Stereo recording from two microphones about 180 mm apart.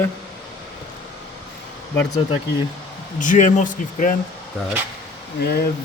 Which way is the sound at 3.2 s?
45° left (ahead or behind).